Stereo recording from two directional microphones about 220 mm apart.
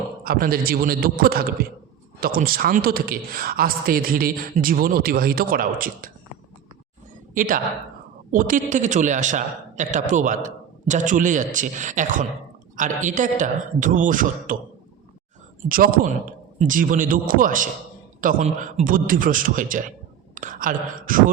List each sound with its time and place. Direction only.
0.3 s a man's voice: 40° right (ahead or behind)
7.3 s a man's voice: 40° right (ahead or behind)
15.7 s a man's voice: 40° right (ahead or behind)